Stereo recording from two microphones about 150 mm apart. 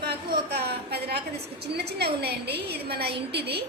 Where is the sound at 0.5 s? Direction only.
90° right.